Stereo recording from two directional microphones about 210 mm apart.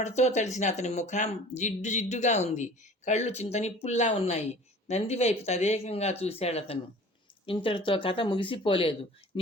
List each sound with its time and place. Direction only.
0.0 s speech: 30° left (ahead or behind)